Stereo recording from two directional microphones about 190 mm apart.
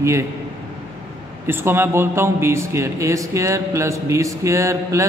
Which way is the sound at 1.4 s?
10° right (ahead or behind).